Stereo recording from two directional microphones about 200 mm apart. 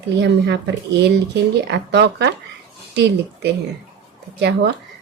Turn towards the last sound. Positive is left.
turn(degrees=-55)  # may be behind; listen again after turning